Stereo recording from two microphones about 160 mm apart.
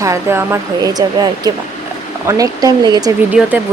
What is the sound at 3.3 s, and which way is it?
Speech, 10° right (ahead or behind).